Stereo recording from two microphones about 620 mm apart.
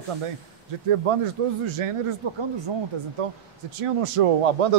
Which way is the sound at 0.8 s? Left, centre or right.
Right.